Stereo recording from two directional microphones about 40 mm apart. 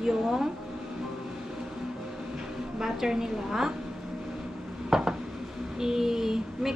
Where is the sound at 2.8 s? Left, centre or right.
Centre.